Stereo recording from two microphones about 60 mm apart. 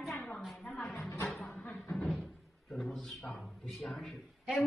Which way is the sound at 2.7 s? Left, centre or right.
Centre.